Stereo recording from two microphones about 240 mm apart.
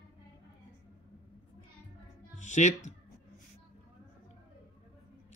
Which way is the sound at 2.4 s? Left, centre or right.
Left.